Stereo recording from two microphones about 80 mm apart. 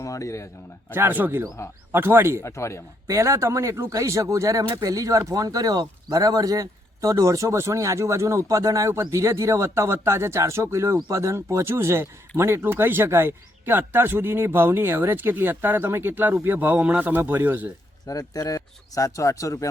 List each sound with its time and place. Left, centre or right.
0.0 s a man's voice: left
0.9 s speech: right
2.4 s speech: left
3.1 s speech: right
18.0 s speech: left